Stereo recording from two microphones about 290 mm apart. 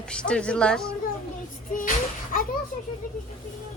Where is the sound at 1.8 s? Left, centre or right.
Left.